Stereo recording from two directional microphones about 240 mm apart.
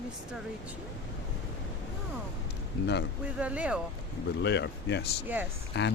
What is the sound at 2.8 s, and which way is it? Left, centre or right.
Speech, left.